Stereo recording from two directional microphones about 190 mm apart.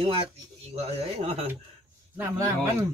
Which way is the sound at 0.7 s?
30° right (ahead or behind).